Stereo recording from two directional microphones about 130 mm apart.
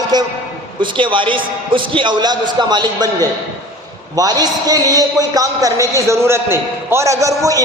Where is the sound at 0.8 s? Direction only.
40° right (ahead or behind).